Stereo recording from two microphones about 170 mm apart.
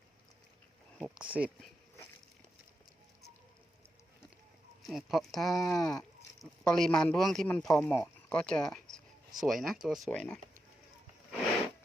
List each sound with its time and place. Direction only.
0.9 s speech: 5° right (ahead or behind)
4.8 s speech: centre (ahead or behind)
5.7 s sheep: 20° left (ahead or behind)
6.0 s speech: 5° left (ahead or behind)